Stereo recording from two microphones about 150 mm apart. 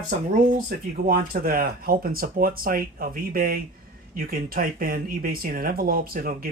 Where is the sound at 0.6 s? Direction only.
75° right (ahead or behind).